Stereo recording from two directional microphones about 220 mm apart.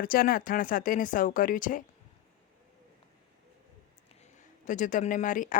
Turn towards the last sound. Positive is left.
turn(degrees=35)  # may be behind; listen again after turning